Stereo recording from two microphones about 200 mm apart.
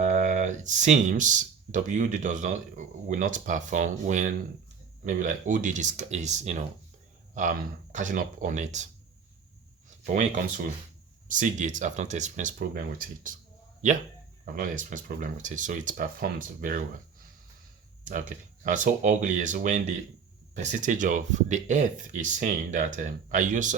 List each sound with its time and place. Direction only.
0.0 s speech: 35° right (ahead or behind)
11.3 s speech: 40° right (ahead or behind)
18.0 s speech: 40° right (ahead or behind)